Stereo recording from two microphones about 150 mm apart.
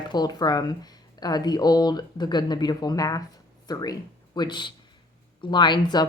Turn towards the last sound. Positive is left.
turn(degrees=30)  # may be behind; listen again after turning